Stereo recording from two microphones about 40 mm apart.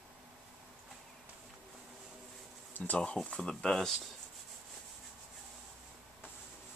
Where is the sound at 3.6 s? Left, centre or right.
Centre.